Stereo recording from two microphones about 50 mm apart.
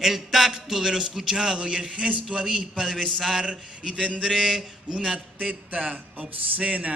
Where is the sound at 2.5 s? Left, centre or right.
Centre.